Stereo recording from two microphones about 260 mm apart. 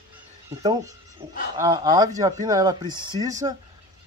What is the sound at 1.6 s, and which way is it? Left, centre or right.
Speech, centre.